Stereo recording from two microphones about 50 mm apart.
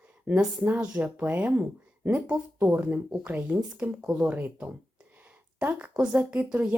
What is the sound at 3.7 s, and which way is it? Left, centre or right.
Speech, centre.